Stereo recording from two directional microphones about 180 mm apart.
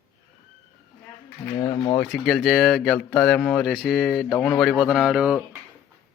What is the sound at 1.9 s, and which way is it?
Speech, 5° left (ahead or behind).